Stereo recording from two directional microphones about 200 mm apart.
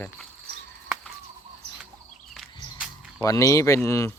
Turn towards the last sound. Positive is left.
turn(degrees=15)  # may be behind; listen again after turning